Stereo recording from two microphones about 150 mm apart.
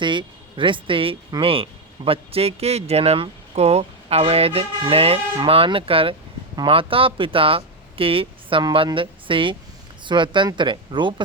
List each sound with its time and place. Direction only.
0.0 s a man's voice: 30° right (ahead or behind)